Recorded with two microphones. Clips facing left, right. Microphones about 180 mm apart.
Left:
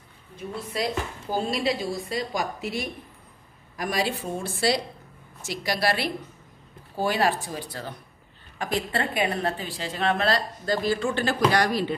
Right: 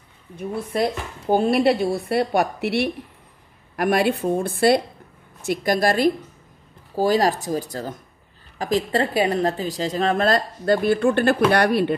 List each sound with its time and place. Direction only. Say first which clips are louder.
0.4 s speech: right 7 dB; 55° right (ahead or behind); by 2.9 s 70° right (ahead or behind)
3.7 s a woman's voice: right 8 dB; 60° right (ahead or behind)